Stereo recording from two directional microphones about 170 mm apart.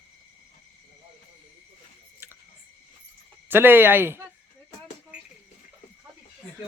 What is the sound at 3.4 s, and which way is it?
Speech, 10° right (ahead or behind).